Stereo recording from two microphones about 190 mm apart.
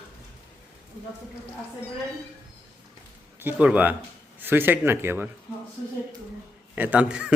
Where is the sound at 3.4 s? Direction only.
10° right (ahead or behind).